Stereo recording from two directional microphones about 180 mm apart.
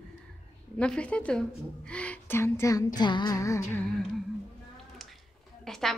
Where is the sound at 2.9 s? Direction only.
25° left (ahead or behind).